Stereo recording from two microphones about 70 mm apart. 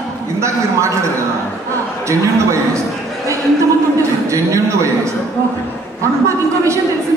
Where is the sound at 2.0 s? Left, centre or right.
Right.